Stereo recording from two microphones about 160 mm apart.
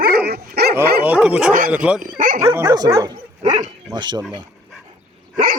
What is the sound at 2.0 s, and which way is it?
Speech, 60° right (ahead or behind).